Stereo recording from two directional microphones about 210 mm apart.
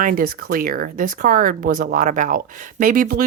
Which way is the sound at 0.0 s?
40° right (ahead or behind).